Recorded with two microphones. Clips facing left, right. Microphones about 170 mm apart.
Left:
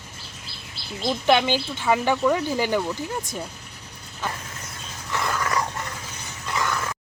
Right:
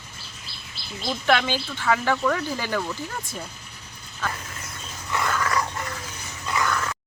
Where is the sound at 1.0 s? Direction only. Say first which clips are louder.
Left 3 dB; 20° left (ahead or behind).